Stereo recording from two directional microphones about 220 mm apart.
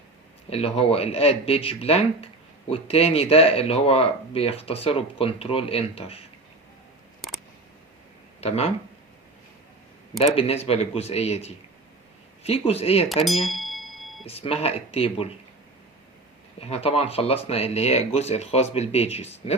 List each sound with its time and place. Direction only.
0.5 s speech: 25° left (ahead or behind)
8.4 s speech: 30° left (ahead or behind)
10.2 s speech: 25° left (ahead or behind)
13.1 s a sound: centre (ahead or behind)
14.3 s speech: 25° left (ahead or behind)
16.6 s speech: 25° left (ahead or behind)